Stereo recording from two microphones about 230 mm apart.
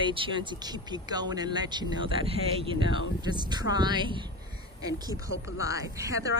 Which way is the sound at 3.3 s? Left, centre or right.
Centre.